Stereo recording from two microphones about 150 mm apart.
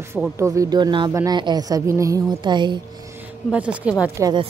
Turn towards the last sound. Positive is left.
turn(degrees=-20)  # may be behind; listen again after turning